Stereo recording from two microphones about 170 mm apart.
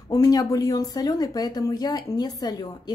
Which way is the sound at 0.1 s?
20° left (ahead or behind).